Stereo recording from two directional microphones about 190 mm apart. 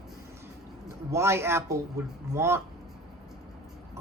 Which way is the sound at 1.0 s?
15° right (ahead or behind).